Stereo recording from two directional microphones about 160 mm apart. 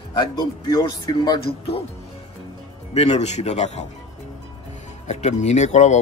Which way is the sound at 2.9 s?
45° left (ahead or behind).